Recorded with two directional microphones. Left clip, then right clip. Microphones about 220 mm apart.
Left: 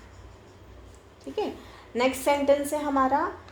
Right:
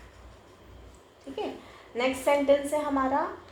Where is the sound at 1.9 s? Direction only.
50° left (ahead or behind).